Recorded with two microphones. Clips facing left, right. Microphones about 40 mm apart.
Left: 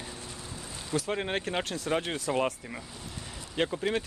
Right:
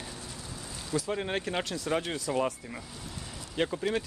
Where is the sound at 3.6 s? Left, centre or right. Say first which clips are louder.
Left 1 dB; centre.